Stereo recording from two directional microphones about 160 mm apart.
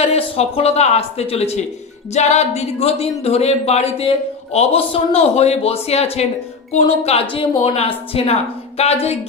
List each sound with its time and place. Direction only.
0.0 s speech: 40° left (ahead or behind)